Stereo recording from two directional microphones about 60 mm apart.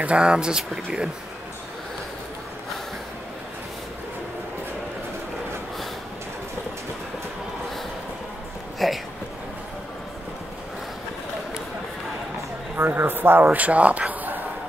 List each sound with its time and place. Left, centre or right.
0.0 s speech: centre
8.7 s a sound: centre
12.7 s speech: right